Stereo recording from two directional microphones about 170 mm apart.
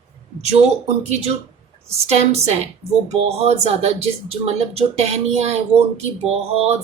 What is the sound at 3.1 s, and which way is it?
Speech, 35° right (ahead or behind).